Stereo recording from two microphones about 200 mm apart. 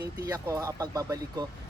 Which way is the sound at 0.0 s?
15° right (ahead or behind).